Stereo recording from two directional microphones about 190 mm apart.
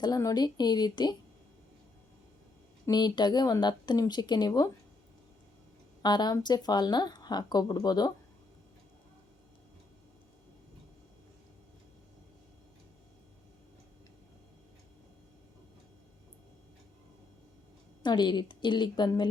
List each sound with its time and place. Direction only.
0.0 s speech: 20° left (ahead or behind)
2.8 s speech: 20° left (ahead or behind)
6.0 s speech: 20° left (ahead or behind)
18.0 s speech: 25° left (ahead or behind)